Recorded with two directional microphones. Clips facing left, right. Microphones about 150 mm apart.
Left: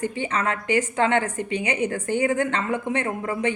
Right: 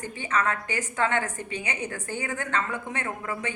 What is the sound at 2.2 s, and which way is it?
Speech, 30° left (ahead or behind).